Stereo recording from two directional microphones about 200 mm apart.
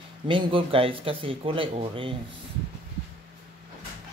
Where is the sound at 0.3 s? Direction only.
25° right (ahead or behind).